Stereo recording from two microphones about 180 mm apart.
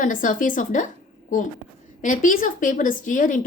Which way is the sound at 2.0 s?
50° left (ahead or behind).